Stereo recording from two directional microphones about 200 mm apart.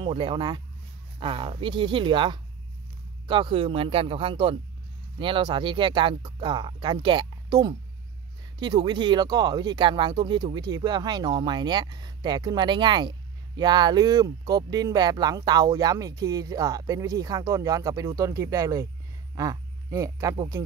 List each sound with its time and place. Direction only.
0.0 s speech: 25° right (ahead or behind)